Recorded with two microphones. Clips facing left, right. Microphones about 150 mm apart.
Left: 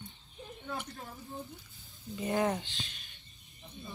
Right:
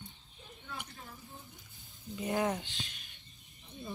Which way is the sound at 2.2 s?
Centre (ahead or behind).